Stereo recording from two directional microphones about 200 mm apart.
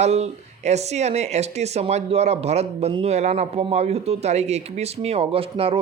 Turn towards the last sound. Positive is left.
turn(degrees=-30)  # may be behind; listen again after turning